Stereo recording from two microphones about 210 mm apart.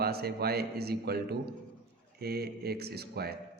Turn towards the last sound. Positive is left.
turn(degrees=-50)  # may be behind; listen again after turning